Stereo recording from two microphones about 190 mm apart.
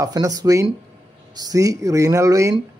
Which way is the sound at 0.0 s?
20° right (ahead or behind).